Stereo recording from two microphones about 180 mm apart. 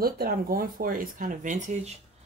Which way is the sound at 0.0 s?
55° right (ahead or behind).